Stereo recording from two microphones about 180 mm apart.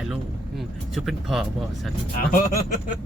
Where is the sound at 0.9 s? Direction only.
Centre (ahead or behind).